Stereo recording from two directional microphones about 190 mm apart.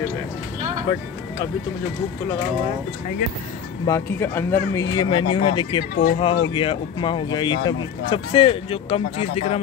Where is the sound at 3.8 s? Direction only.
15° left (ahead or behind).